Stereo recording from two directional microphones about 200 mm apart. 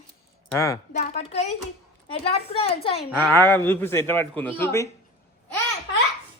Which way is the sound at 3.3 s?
10° left (ahead or behind).